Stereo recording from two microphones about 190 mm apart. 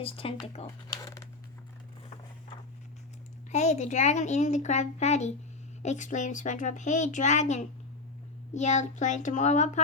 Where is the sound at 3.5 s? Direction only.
35° left (ahead or behind).